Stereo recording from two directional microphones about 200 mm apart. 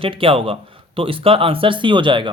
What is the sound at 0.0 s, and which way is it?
Speech, 25° right (ahead or behind).